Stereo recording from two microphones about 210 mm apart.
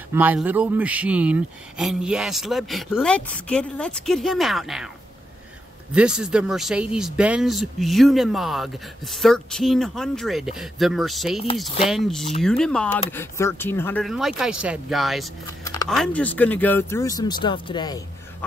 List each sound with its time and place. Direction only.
0.1 s speech: 10° right (ahead or behind)
5.9 s speech: 5° right (ahead or behind)
14.0 s speech: centre (ahead or behind)
15.6 s a sound: 20° left (ahead or behind)
15.9 s speech: 5° left (ahead or behind); by 18.0 s 20° left (ahead or behind)